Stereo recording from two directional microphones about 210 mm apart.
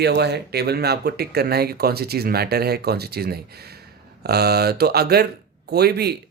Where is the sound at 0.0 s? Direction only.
55° right (ahead or behind).